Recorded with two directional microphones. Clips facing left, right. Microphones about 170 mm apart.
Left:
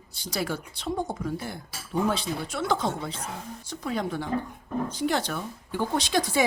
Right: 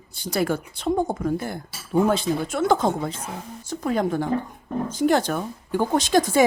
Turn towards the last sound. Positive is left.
turn(degrees=-45)  # may be behind; listen again after turning